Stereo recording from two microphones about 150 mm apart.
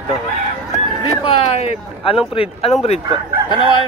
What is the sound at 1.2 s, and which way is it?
Speech, 40° left (ahead or behind).